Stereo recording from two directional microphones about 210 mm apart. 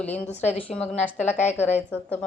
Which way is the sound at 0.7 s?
30° left (ahead or behind).